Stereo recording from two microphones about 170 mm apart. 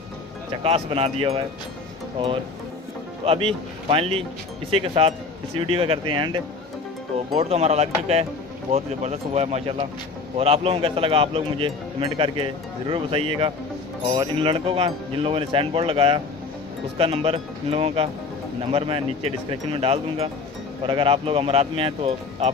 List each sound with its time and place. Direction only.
0.7 s speech: 35° right (ahead or behind)
7.3 s speech: 40° right (ahead or behind)